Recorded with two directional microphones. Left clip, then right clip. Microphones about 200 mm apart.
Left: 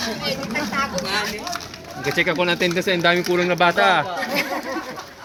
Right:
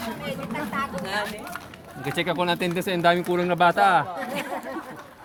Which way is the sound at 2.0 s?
55° right (ahead or behind).